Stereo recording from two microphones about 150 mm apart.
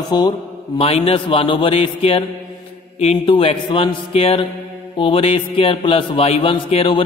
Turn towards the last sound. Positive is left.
turn(degrees=35)  # may be behind; listen again after turning